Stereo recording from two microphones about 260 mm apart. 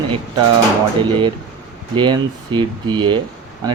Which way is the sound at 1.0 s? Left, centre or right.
Centre.